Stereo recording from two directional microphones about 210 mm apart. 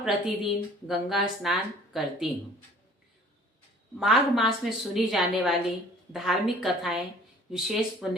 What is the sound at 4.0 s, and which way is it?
A woman's voice, centre (ahead or behind).